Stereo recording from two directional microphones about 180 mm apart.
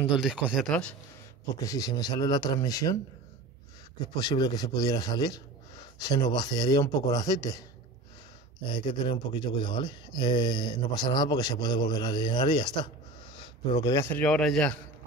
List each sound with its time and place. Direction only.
0.0 s speech: 5° right (ahead or behind)
1.6 s speech: 20° left (ahead or behind)
4.1 s speech: 20° left (ahead or behind)
8.6 s speech: 25° left (ahead or behind); by 14.8 s 5° left (ahead or behind)